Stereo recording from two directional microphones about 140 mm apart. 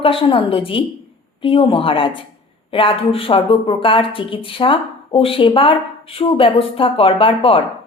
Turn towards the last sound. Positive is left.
turn(degrees=40)  # may be behind; listen again after turning